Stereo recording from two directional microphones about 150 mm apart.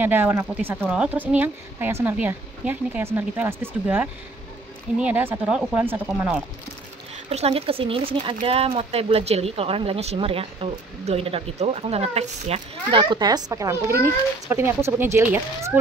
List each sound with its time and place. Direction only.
0.0 s speech: 15° right (ahead or behind)
7.2 s speech: 40° right (ahead or behind); by 15.8 s 10° right (ahead or behind)